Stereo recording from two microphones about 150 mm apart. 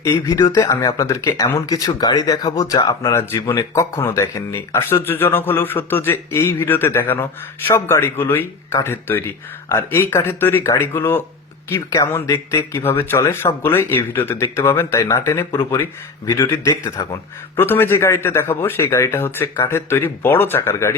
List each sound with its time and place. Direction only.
0.0 s a man's voice: 20° left (ahead or behind)